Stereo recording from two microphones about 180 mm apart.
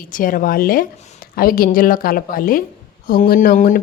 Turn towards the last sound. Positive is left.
turn(degrees=50)  # may be behind; listen again after turning